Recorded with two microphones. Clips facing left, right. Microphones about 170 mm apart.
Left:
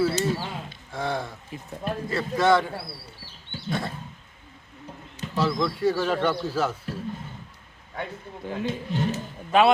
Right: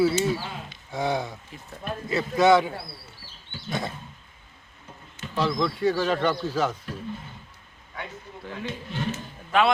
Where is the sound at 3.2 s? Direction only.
30° left (ahead or behind).